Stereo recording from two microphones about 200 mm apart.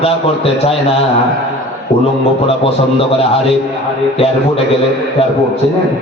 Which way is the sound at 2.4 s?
30° left (ahead or behind).